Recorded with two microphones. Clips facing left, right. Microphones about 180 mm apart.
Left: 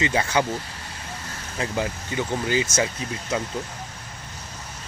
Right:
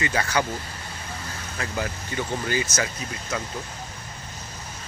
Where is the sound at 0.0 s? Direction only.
25° left (ahead or behind).